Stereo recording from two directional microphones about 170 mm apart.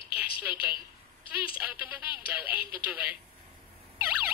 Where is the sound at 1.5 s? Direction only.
10° right (ahead or behind).